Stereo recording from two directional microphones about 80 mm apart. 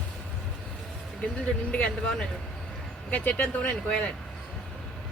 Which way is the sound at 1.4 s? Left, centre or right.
Centre.